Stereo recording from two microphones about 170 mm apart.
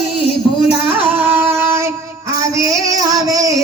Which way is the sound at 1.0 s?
10° right (ahead or behind).